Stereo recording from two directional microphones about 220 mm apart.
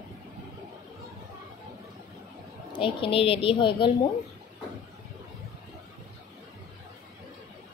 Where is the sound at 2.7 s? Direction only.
25° left (ahead or behind).